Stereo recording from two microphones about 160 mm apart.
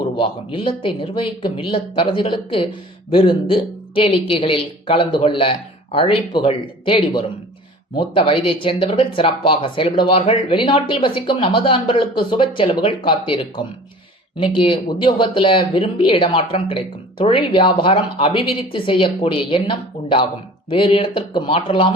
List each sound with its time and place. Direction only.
0.2 s speech: 30° left (ahead or behind)